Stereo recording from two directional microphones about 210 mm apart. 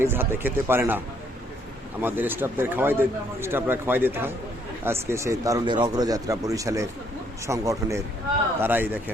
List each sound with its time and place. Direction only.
0.0 s speech: 10° right (ahead or behind)